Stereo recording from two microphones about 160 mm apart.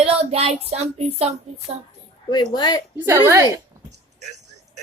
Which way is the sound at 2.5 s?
25° left (ahead or behind).